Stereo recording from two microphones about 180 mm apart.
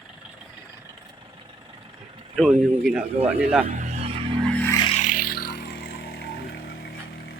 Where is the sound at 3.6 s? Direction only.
40° right (ahead or behind).